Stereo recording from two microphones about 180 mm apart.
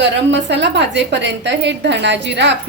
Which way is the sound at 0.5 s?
75° right (ahead or behind).